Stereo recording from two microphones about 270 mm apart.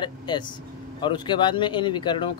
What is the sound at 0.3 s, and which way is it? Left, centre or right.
Speech, centre.